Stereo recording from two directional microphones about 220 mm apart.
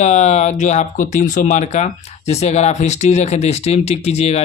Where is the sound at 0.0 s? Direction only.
30° left (ahead or behind).